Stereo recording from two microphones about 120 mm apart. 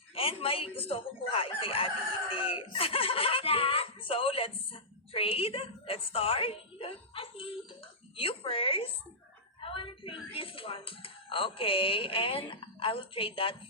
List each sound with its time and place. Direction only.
0.1 s speech: 50° left (ahead or behind)